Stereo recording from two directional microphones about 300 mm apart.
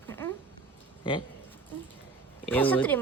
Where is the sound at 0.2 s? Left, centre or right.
Centre.